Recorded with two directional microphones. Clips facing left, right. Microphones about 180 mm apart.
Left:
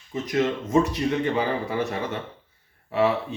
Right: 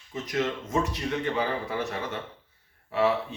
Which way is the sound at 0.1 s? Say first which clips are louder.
Left 5 dB; 15° left (ahead or behind).